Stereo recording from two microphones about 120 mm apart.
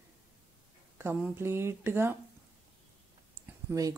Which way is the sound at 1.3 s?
20° right (ahead or behind).